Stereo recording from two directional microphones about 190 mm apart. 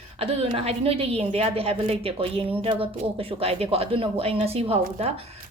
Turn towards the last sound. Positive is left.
turn(degrees=-30)  # may be behind; listen again after turning